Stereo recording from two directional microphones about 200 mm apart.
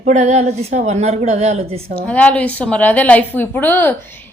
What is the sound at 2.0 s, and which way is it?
A woman's voice, 5° left (ahead or behind).